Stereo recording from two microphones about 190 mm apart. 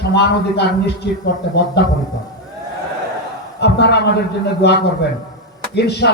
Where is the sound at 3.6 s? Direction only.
60° left (ahead or behind).